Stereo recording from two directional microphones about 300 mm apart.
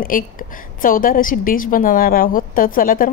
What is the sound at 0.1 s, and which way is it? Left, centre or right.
A woman's voice, left.